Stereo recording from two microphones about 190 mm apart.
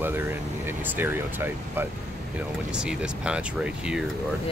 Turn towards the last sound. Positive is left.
turn(degrees=-5)  # may be behind; listen again after turning